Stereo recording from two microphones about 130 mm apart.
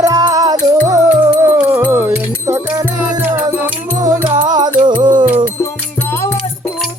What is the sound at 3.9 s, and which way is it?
Music, 25° right (ahead or behind).